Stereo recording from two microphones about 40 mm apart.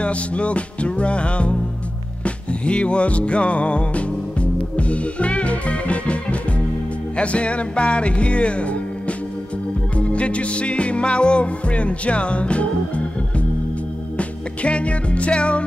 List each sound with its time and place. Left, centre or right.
0.0 s music: left
7.2 s music: left
9.9 s music: left
14.1 s music: left